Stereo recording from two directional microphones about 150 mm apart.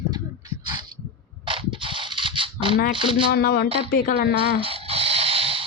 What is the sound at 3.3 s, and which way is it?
Speech, 90° left.